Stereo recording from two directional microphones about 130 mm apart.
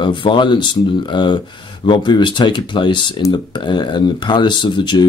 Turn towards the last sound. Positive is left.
turn(degrees=35)  # may be behind; listen again after turning